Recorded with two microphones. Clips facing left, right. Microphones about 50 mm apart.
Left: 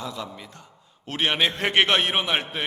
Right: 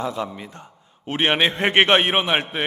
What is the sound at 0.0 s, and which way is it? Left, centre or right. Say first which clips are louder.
A man's voice: right 7 dB; right.